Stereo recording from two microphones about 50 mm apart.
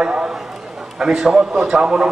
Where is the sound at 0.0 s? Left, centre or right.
Centre.